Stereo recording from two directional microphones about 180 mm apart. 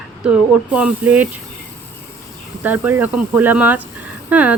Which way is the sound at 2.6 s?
10° right (ahead or behind).